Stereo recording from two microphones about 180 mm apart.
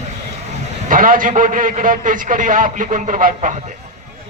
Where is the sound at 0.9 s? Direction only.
50° right (ahead or behind).